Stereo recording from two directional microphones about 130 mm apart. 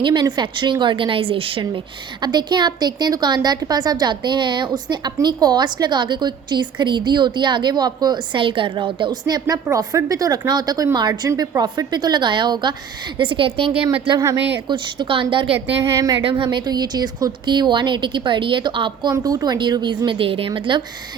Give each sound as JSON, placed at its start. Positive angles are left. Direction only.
{"t": 0.0, "sound": "a woman's voice", "side_deg": -35}
{"t": 15.8, "sound": "speech", "side_deg": -25}
{"t": 16.4, "sound": "a woman's voice", "side_deg": -35}
{"t": 19.1, "sound": "a woman's voice", "side_deg": -30}